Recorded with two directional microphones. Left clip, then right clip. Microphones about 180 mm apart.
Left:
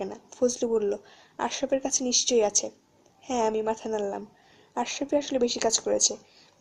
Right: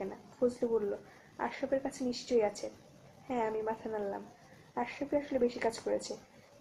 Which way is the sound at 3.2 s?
40° left (ahead or behind).